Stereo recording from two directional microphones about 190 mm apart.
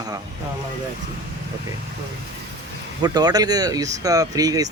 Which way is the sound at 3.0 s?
20° right (ahead or behind).